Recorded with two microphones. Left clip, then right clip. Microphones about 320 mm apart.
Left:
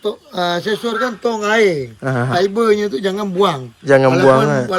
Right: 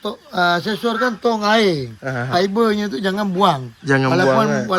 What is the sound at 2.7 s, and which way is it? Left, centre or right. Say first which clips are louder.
Speech: left 7 dB; right.